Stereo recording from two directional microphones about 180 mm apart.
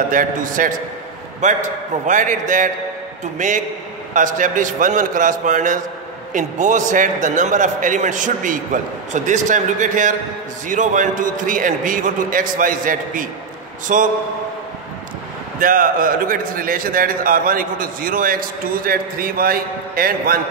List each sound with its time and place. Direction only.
0.1 s a man's voice: 50° right (ahead or behind)
15.6 s a man's voice: 50° right (ahead or behind)